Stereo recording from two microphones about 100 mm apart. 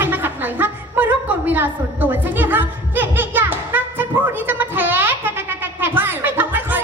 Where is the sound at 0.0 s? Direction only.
20° right (ahead or behind).